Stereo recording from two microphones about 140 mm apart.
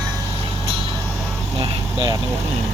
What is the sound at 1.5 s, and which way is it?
Speech, 35° right (ahead or behind).